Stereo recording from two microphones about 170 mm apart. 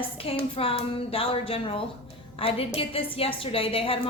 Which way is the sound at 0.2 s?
35° left (ahead or behind).